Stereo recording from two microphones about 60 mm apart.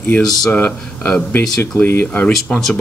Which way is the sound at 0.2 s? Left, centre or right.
Centre.